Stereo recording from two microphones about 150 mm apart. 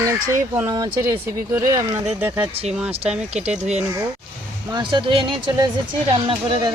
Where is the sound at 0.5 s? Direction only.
20° right (ahead or behind).